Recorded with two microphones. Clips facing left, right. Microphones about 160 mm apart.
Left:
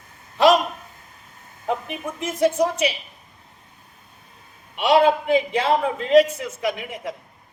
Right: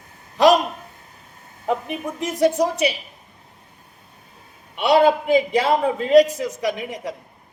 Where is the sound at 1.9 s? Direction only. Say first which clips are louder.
Right 2 dB; 35° right (ahead or behind).